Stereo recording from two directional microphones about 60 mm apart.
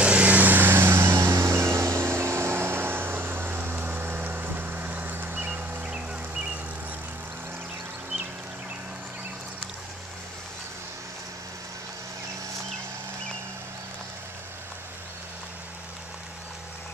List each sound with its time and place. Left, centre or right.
0.0 s vehicle: right
5.9 s music: centre